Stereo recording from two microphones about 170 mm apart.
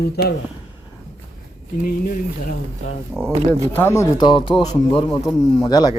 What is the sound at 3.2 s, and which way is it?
Speech, 5° left (ahead or behind).